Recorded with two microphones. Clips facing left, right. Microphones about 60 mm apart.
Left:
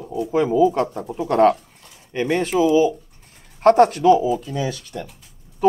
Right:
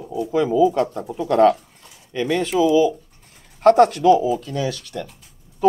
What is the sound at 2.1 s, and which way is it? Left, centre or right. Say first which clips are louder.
Speech: even; left.